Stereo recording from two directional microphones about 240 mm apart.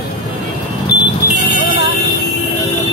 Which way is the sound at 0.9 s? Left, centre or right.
Left.